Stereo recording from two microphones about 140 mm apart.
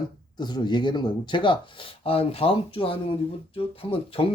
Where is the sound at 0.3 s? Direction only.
30° left (ahead or behind).